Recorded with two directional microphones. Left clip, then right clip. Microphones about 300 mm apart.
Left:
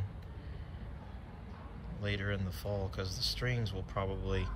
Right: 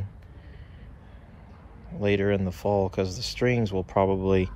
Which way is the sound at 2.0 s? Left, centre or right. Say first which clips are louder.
Right 14 dB; centre.